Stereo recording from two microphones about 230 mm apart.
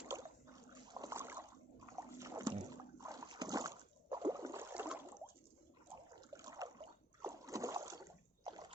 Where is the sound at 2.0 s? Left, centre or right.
Centre.